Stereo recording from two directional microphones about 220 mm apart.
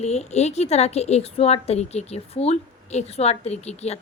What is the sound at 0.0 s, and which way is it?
Speech, 30° left (ahead or behind).